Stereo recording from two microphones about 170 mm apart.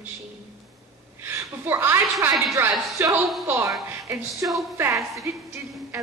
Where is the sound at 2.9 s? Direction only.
15° right (ahead or behind).